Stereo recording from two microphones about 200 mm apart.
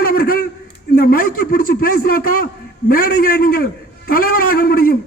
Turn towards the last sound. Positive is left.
turn(degrees=50)  # may be behind; listen again after turning